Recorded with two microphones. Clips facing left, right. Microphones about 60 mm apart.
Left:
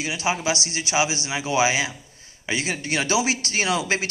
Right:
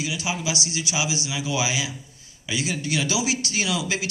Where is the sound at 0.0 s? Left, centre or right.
Left.